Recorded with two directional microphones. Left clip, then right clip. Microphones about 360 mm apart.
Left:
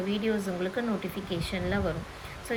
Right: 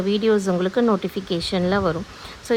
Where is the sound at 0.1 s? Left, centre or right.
Centre.